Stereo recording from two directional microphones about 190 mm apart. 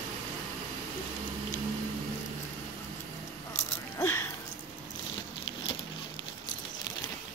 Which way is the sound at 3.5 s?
35° left (ahead or behind).